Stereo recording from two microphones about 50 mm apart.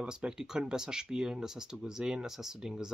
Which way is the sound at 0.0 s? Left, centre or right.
Centre.